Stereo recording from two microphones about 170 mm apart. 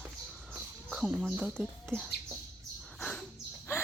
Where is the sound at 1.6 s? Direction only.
5° right (ahead or behind).